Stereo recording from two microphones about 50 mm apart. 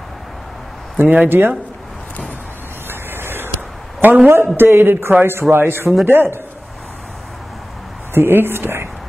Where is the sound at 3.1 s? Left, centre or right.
Right.